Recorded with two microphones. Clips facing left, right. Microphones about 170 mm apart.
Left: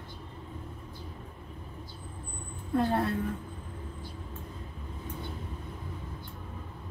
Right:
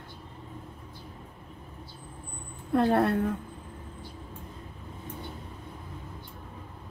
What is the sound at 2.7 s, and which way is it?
Speech, 65° right (ahead or behind).